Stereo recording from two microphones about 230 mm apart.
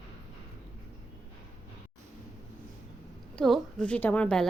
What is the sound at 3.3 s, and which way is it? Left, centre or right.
A woman's voice, centre.